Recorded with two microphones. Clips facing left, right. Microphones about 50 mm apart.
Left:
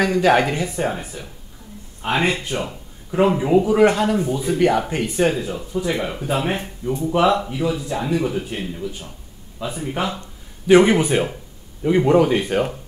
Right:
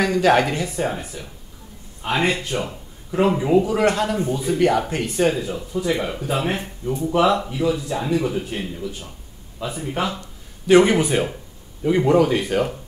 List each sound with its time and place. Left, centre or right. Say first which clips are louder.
0.0 s speech: left 1 dB; centre
3.1 s a man's voice: left 1 dB; centre